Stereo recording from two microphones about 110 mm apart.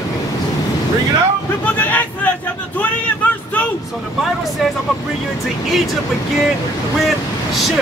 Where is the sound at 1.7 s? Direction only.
15° left (ahead or behind).